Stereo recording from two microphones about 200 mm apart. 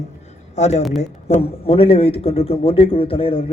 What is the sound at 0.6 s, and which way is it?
A man's voice, 35° left (ahead or behind).